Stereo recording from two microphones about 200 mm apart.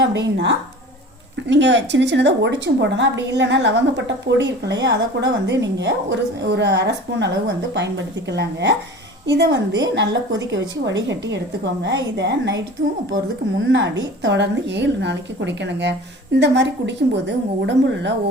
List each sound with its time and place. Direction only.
0.0 s a woman's voice: 60° right (ahead or behind)
13.7 s a woman's voice: 65° right (ahead or behind)